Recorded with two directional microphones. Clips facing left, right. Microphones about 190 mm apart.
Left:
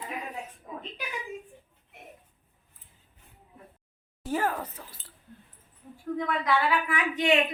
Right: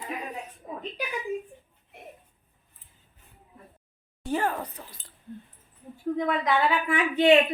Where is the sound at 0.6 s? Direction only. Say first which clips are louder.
Right 5 dB; 25° right (ahead or behind).